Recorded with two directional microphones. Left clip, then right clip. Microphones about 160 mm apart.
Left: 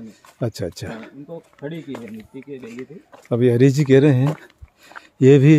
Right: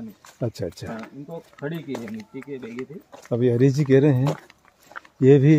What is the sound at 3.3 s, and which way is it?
Speech, 45° left (ahead or behind).